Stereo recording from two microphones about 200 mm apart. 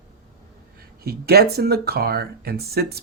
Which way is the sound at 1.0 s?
50° right (ahead or behind).